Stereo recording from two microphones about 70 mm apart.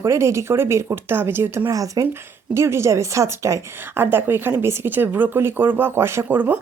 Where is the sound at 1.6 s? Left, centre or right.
Right.